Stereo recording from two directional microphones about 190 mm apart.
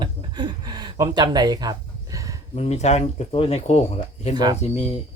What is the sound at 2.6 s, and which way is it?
Speech, 35° left (ahead or behind).